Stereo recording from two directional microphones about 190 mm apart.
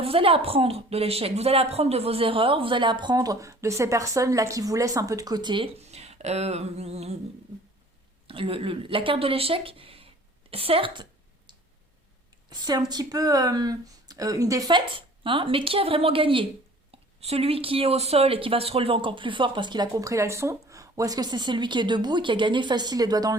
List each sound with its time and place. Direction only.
0.0 s speech: 30° right (ahead or behind)
8.3 s speech: 30° right (ahead or behind)
12.5 s speech: 20° right (ahead or behind)